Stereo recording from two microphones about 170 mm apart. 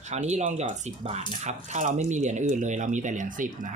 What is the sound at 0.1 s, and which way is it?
Speech, 40° right (ahead or behind).